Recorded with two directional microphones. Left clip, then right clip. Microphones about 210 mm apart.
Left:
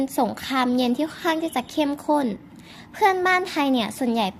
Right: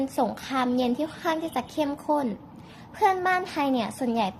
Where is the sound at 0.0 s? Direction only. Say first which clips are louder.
Left 3 dB; 40° left (ahead or behind).